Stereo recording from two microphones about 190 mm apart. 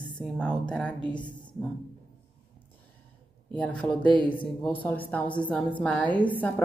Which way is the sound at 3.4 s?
10° left (ahead or behind).